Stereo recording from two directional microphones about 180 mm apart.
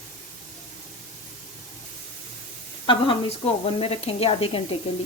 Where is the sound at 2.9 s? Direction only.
30° left (ahead or behind).